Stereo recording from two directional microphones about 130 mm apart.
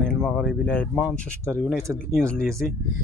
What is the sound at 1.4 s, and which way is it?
Speech, 20° right (ahead or behind).